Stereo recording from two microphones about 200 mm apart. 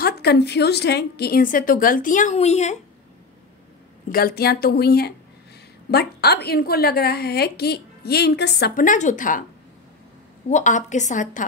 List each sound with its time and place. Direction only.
0.0 s a woman's voice: 55° left (ahead or behind); by 2.8 s 35° left (ahead or behind)
4.1 s a woman's voice: 50° left (ahead or behind)
10.5 s a woman's voice: 40° left (ahead or behind)